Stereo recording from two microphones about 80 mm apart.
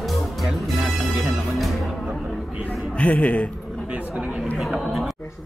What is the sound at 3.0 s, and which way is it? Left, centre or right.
Speech, centre.